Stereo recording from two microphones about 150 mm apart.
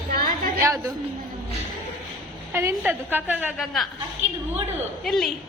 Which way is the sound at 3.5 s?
Centre (ahead or behind).